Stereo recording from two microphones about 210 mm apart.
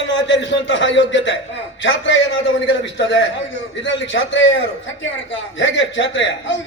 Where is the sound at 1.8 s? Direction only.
60° left (ahead or behind).